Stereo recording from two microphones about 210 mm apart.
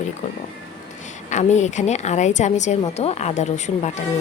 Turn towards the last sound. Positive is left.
turn(degrees=35)  # may be behind; listen again after turning